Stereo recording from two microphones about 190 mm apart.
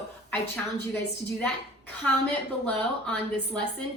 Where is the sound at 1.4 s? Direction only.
5° left (ahead or behind).